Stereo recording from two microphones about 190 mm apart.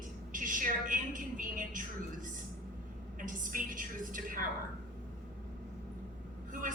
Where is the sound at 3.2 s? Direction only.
45° right (ahead or behind).